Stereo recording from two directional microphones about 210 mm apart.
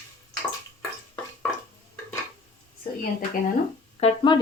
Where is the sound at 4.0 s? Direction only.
25° left (ahead or behind).